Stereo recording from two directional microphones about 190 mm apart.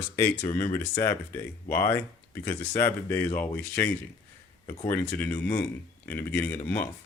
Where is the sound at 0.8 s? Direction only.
15° left (ahead or behind).